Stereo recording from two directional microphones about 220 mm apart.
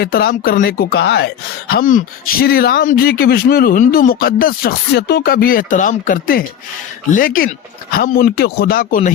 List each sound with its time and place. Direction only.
0.0 s speech: 45° left (ahead or behind)